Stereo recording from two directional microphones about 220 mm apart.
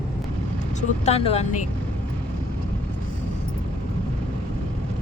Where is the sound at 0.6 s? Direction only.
35° left (ahead or behind).